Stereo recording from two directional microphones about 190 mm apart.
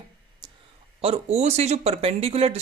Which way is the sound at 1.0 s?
35° right (ahead or behind).